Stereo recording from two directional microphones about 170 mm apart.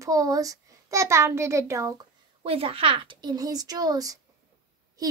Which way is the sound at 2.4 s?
35° right (ahead or behind).